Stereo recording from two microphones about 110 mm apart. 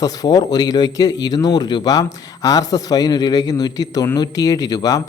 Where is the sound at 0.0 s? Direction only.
35° left (ahead or behind).